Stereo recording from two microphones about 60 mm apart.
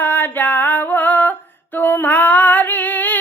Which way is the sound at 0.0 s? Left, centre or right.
Left.